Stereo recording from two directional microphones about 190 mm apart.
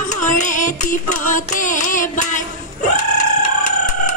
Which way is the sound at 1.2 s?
45° left (ahead or behind).